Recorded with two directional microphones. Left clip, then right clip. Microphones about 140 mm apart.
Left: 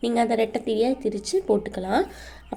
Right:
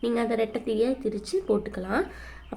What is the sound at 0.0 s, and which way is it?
Speech, 15° left (ahead or behind).